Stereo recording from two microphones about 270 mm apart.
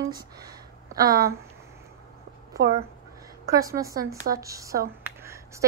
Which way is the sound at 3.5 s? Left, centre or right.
Centre.